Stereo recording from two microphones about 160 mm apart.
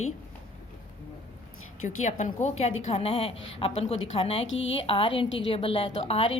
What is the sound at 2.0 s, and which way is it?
Speech, 50° left (ahead or behind).